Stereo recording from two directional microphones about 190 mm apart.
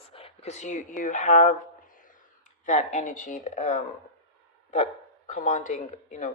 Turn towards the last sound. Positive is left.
turn(degrees=40)  # may be behind; listen again after turning